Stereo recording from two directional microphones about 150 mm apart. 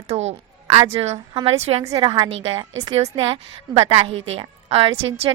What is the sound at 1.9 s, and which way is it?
A woman's voice, 35° right (ahead or behind).